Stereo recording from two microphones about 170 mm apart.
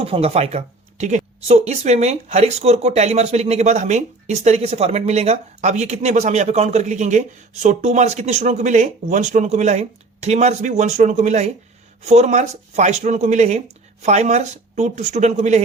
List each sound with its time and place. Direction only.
0.0 s speech: 35° right (ahead or behind)